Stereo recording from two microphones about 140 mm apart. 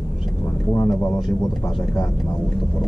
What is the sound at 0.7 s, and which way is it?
Speech, 20° left (ahead or behind).